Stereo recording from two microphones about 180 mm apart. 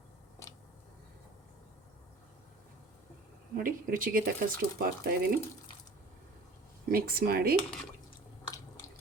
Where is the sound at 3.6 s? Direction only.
50° right (ahead or behind).